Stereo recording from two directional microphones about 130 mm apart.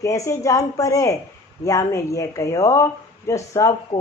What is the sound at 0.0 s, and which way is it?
A woman's voice, 25° left (ahead or behind).